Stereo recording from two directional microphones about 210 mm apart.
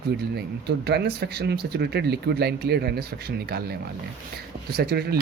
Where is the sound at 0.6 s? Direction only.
50° right (ahead or behind).